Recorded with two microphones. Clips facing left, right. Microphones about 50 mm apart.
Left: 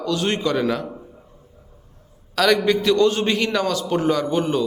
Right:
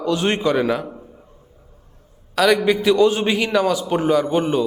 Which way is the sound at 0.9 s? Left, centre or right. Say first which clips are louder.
Left 1 dB; centre.